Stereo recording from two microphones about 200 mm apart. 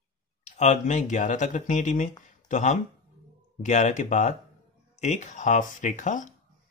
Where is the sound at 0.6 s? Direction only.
35° left (ahead or behind).